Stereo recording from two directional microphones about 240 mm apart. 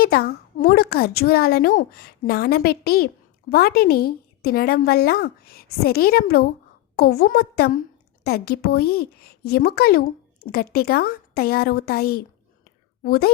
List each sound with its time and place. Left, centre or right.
0.0 s a woman's voice: left